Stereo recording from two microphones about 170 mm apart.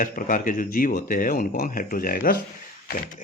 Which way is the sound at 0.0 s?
55° left (ahead or behind).